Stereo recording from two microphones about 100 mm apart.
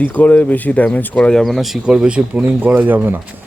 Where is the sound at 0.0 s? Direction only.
15° left (ahead or behind).